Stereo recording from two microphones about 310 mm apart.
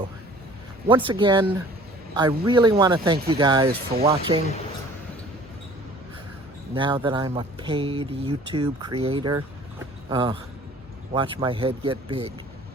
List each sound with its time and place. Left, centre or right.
0.9 s speech: centre
6.7 s speech: centre